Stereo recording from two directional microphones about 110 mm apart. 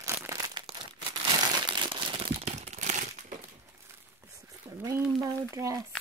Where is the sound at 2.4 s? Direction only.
90° right.